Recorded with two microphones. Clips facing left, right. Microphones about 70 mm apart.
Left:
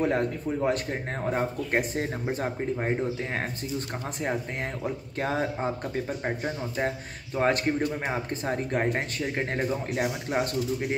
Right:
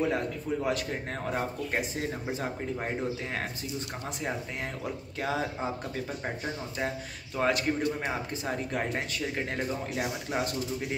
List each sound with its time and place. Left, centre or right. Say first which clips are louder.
0.0 s speech: left 3 dB; left
2.2 s speech: left 4 dB; left
5.2 s speech: left 3 dB; left
7.3 s speech: left 3 dB; left